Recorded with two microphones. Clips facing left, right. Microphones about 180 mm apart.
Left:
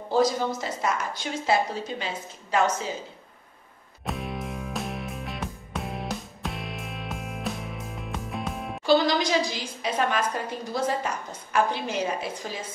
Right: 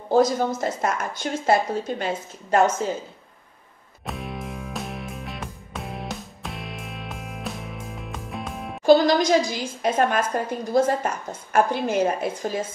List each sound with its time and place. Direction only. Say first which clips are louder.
0.1 s a woman's voice: right 4 dB; 50° right (ahead or behind)
4.0 s music: even; centre (ahead or behind)
8.8 s a woman's voice: right 6 dB; 45° right (ahead or behind)